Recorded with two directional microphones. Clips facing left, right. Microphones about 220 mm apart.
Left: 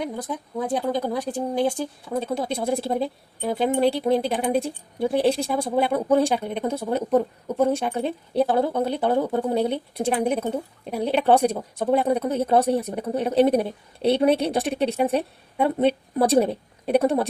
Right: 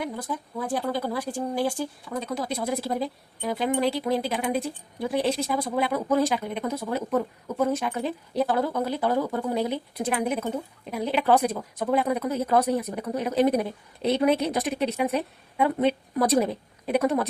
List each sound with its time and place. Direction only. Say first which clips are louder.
0.0 s speech: left 2 dB; 20° left (ahead or behind)